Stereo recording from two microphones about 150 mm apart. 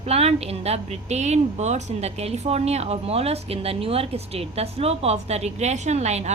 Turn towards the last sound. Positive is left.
turn(degrees=-50)  # may be behind; listen again after turning